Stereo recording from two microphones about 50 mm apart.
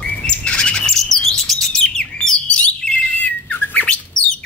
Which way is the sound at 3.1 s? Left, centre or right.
Left.